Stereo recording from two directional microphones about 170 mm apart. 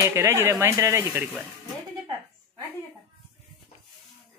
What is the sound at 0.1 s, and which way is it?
Speech, 15° right (ahead or behind).